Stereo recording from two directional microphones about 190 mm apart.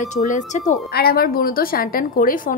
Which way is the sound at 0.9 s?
55° left (ahead or behind).